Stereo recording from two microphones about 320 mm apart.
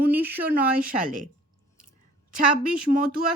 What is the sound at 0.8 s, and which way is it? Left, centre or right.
Speech, right.